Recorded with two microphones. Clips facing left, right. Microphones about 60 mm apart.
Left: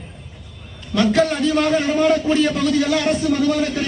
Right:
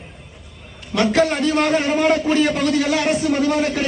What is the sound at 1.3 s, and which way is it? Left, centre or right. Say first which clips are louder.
A man's voice: even; right.